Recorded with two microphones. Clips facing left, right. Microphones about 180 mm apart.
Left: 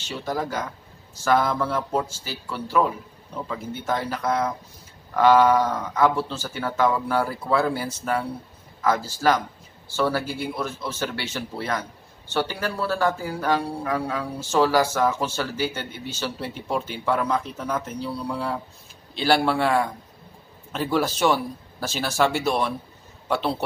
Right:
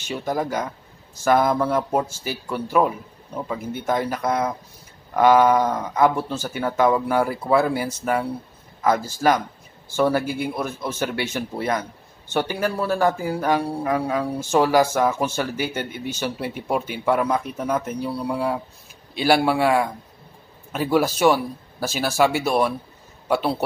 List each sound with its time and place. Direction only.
0.1 s a man's voice: 15° right (ahead or behind)